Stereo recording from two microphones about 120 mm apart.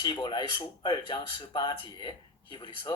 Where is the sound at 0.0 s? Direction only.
40° left (ahead or behind).